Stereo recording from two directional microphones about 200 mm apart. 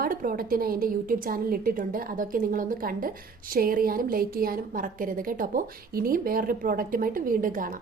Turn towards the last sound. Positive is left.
turn(degrees=-45)  # may be behind; listen again after turning